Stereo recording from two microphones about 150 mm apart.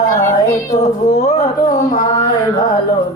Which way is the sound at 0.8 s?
50° left (ahead or behind).